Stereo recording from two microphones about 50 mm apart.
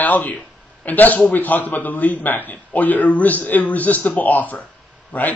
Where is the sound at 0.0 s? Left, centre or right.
Left.